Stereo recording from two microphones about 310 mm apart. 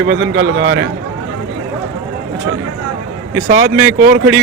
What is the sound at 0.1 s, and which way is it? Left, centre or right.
Speech, right.